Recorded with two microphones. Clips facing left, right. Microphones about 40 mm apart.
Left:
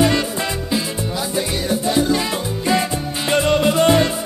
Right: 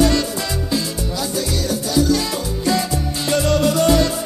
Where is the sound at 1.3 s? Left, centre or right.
Left.